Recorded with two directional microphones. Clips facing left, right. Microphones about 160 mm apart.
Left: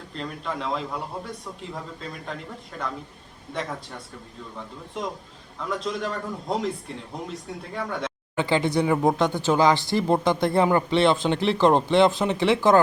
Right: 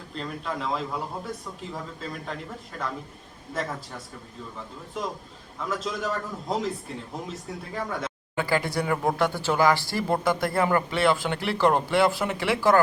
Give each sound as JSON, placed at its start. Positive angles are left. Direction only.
{"t": 0.1, "sound": "a man's voice", "side_deg": 0}
{"t": 5.5, "sound": "a man's voice", "side_deg": 0}
{"t": 8.4, "sound": "speech", "side_deg": 20}